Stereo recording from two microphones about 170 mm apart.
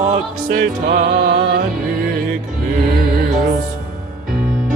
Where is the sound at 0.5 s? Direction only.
80° right.